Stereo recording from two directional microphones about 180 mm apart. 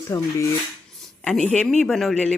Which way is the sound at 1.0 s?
5° left (ahead or behind).